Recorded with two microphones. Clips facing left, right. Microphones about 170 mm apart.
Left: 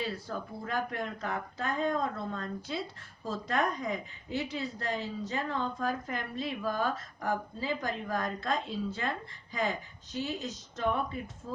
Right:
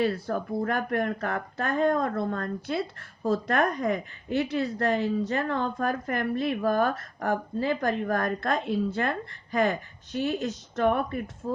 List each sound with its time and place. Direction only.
0.0 s a woman's voice: 60° right (ahead or behind)